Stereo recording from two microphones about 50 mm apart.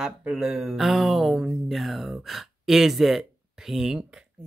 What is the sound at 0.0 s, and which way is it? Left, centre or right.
Speech, centre.